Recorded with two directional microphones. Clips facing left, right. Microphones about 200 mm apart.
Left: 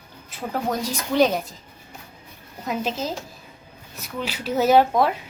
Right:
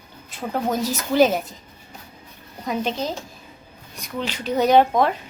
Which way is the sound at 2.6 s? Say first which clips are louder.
Right 2 dB; 5° left (ahead or behind).